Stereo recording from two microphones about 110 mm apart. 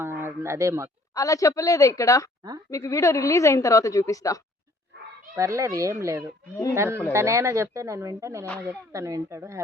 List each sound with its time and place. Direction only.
0.0 s a sound: 20° right (ahead or behind)
1.1 s a woman's voice: 30° left (ahead or behind)
5.3 s speech: 30° right (ahead or behind)